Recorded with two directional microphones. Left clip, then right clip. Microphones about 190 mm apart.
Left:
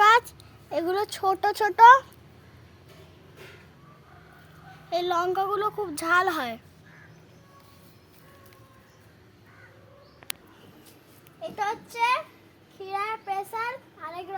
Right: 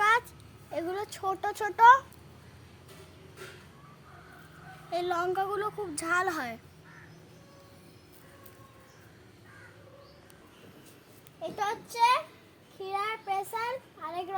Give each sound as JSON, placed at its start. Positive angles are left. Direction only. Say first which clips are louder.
{"t": 0.0, "sound": "a sound", "louder": "left 7 dB", "side_deg": 55}
{"t": 0.7, "sound": "a child's voice", "louder": "left 7 dB", "side_deg": 50}
{"t": 4.9, "sound": "a woman's voice", "louder": "left 5 dB", "side_deg": 40}
{"t": 11.5, "sound": "a child's voice", "louder": "left 3 dB", "side_deg": 5}